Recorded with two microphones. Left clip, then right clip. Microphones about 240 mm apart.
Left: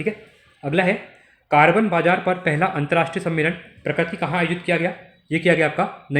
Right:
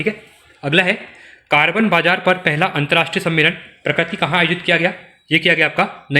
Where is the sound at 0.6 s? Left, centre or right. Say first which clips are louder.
Right 5 dB; centre.